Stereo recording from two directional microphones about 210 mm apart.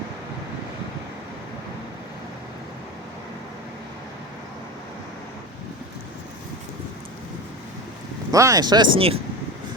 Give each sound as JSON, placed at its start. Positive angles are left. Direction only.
{"t": 8.3, "sound": "speech", "side_deg": -15}